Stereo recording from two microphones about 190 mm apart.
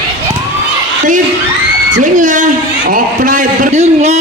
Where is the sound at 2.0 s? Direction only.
40° right (ahead or behind).